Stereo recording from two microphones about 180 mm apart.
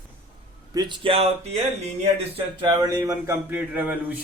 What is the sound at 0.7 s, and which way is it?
Speech, 25° right (ahead or behind).